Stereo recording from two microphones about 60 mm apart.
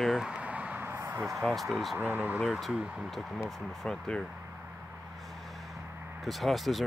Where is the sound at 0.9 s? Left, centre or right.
Right.